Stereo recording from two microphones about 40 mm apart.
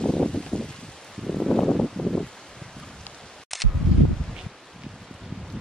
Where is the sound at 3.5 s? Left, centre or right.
Centre.